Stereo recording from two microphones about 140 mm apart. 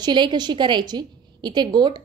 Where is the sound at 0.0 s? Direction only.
35° right (ahead or behind).